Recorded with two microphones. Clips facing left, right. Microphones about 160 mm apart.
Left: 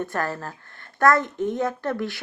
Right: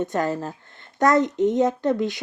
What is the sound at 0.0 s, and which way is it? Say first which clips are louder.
A child's voice: right 4 dB; 20° right (ahead or behind).